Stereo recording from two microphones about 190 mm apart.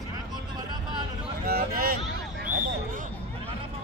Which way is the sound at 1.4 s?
50° right (ahead or behind).